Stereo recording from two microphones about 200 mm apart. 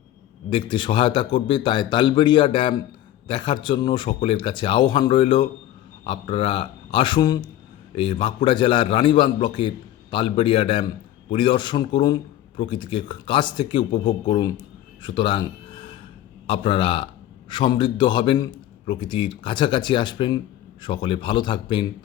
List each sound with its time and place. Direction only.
0.5 s a man's voice: 25° left (ahead or behind)
15.0 s a sound: 25° left (ahead or behind)
16.5 s a man's voice: 25° left (ahead or behind)